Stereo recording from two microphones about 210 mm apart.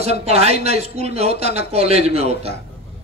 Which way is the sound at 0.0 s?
30° right (ahead or behind).